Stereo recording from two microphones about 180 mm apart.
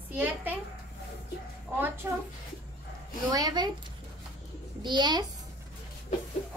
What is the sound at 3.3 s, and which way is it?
Speech, 20° right (ahead or behind).